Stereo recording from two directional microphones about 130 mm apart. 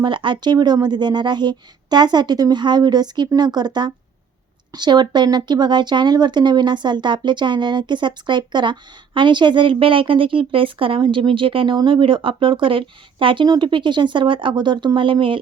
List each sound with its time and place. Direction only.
0.0 s speech: 40° right (ahead or behind)